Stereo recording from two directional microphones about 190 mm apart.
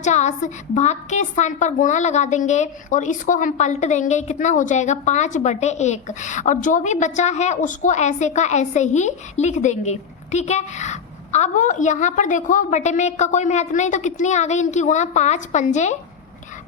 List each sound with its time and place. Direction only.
0.0 s a woman's voice: 40° left (ahead or behind)